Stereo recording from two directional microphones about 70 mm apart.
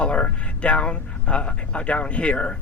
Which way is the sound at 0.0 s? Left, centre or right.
Centre.